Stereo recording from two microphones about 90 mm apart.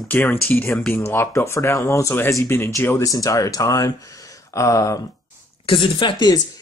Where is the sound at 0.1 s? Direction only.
20° left (ahead or behind).